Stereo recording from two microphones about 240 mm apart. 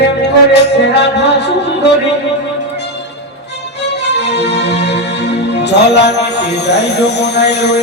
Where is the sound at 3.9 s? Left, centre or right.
Left.